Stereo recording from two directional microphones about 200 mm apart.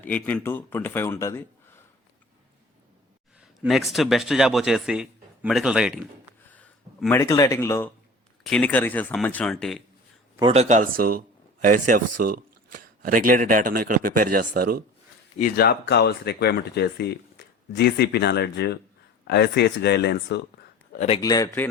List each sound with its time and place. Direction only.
0.0 s a man's voice: 10° left (ahead or behind)
3.6 s a man's voice: centre (ahead or behind)
6.5 s a man's voice: 5° left (ahead or behind)
10.5 s speech: 35° right (ahead or behind)
15.4 s speech: 45° left (ahead or behind)
20.9 s a man's voice: 35° left (ahead or behind)
21.2 s a man's voice: 15° left (ahead or behind)